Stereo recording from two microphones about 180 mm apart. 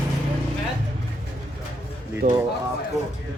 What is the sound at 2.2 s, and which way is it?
Speech, 45° right (ahead or behind).